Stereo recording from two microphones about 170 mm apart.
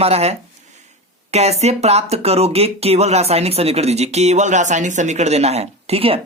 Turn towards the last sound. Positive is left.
turn(degrees=-35)  # may be behind; listen again after turning